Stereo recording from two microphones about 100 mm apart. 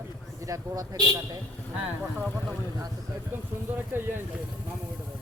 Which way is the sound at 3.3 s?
20° right (ahead or behind).